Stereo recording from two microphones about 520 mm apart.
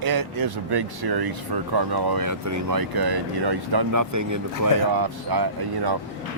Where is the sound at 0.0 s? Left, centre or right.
Right.